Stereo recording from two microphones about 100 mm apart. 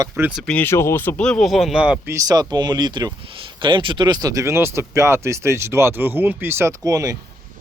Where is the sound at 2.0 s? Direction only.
35° right (ahead or behind).